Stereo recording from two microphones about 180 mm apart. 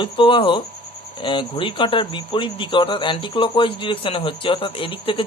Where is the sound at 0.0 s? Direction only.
30° left (ahead or behind).